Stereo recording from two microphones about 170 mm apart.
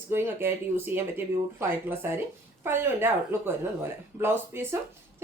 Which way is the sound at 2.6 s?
15° right (ahead or behind).